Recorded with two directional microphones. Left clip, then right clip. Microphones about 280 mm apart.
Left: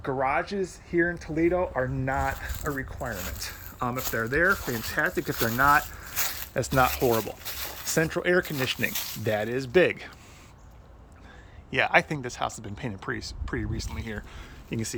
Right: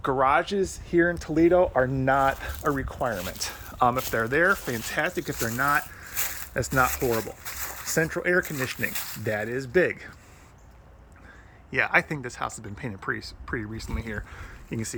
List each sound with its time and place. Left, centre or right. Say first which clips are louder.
0.0 s speech: right 5 dB; right
0.9 s speech: right 4 dB; centre
5.5 s speech: left 4 dB; centre
11.7 s speech: even; centre